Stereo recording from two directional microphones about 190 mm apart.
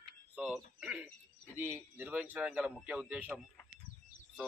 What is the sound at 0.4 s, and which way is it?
A man's voice, 5° right (ahead or behind).